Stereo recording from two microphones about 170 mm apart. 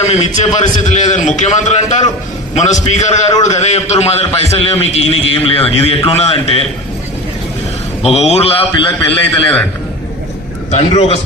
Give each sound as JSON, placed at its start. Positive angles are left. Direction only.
{"t": 0.1, "sound": "a man's voice", "side_deg": 40}
{"t": 8.0, "sound": "a man's voice", "side_deg": 40}
{"t": 9.0, "sound": "a man's voice", "side_deg": 10}
{"t": 10.7, "sound": "a man's voice", "side_deg": 40}